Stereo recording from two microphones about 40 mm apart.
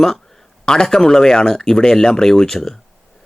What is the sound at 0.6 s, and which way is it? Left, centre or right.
Speech, centre.